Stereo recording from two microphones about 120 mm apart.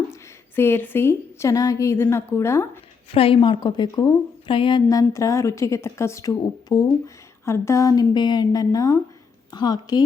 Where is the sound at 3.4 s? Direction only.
40° left (ahead or behind).